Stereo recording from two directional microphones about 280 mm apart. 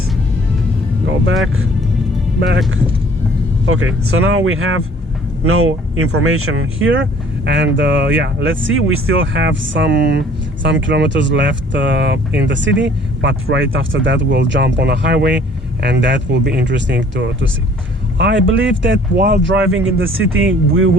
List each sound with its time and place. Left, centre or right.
3.7 s speech: right